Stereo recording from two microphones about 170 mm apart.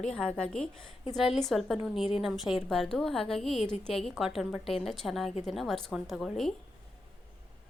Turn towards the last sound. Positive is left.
turn(degrees=0)  # may be behind; listen again after turning